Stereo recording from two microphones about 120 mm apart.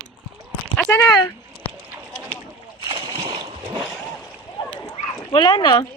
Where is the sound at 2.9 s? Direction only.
35° right (ahead or behind).